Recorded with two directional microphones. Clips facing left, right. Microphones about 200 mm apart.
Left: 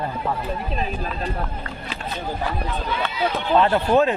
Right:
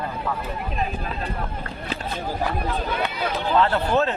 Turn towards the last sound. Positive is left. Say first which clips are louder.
# left 3 dB
turn(degrees=15)  # may be behind; listen again after turning